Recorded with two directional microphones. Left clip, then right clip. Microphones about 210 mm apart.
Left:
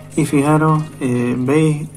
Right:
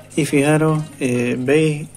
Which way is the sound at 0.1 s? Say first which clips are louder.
Left 1 dB; 25° right (ahead or behind).